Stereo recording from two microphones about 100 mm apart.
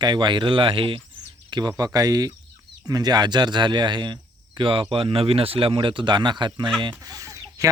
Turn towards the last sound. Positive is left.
turn(degrees=-35)  # may be behind; listen again after turning